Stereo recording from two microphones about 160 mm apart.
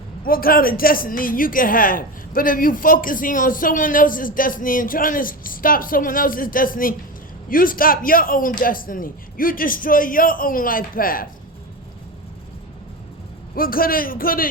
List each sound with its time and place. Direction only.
0.3 s speech: 65° left (ahead or behind)
13.6 s speech: 65° left (ahead or behind)